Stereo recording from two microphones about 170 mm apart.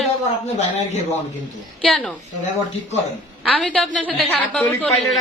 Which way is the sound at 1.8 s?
5° left (ahead or behind).